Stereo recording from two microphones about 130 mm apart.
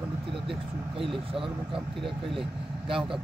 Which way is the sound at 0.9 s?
45° right (ahead or behind).